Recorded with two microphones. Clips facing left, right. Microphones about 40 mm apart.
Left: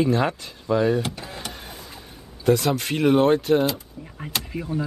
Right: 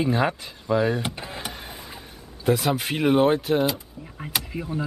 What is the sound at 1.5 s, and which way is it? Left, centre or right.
Vehicle, centre.